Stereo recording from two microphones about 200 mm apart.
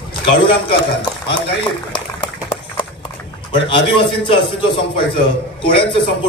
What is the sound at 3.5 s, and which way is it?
A man's voice, 25° left (ahead or behind).